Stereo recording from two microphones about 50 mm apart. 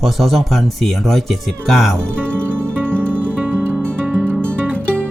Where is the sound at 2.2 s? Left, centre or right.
Right.